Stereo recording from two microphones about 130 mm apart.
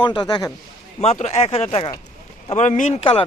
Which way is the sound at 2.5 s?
65° left (ahead or behind).